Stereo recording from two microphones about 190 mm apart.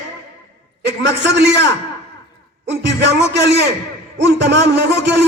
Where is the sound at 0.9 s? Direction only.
65° right (ahead or behind).